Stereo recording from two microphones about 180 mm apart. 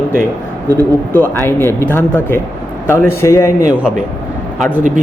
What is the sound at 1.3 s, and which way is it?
A man's voice, 10° left (ahead or behind).